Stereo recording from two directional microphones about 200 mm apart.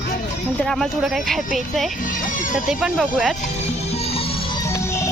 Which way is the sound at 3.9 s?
30° left (ahead or behind).